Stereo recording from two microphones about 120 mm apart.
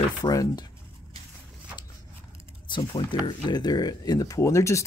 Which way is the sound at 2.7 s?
40° left (ahead or behind).